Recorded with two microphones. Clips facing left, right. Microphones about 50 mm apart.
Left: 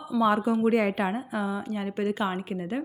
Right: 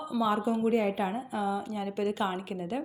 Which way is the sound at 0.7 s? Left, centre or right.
Left.